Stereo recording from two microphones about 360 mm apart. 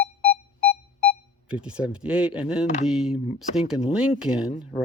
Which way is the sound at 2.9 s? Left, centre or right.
Centre.